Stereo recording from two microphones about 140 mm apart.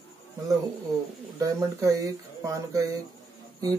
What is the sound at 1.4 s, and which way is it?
Speech, 20° right (ahead or behind).